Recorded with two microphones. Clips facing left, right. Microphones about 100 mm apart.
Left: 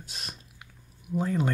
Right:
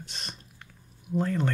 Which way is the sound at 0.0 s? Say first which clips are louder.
Right 1 dB; 5° left (ahead or behind).